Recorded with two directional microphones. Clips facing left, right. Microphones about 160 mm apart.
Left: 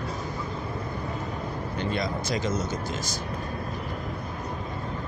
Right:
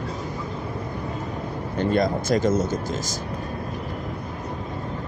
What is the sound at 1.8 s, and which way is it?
Speech, 50° right (ahead or behind).